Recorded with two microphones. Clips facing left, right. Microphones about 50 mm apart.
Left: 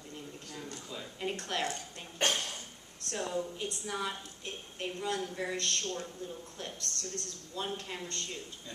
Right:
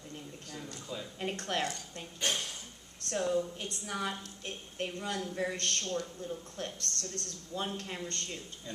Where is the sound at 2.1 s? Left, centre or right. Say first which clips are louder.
Left 3 dB; left.